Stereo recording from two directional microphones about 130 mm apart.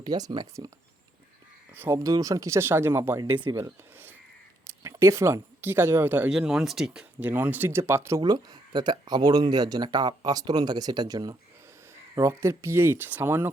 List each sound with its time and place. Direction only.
0.0 s speech: 35° right (ahead or behind)
1.7 s speech: 20° right (ahead or behind)
3.2 s speech: 40° right (ahead or behind)
3.5 s speech: 20° right (ahead or behind)
6.3 s speech: 5° right (ahead or behind); by 8.2 s 20° right (ahead or behind)
8.2 s speech: 30° right (ahead or behind)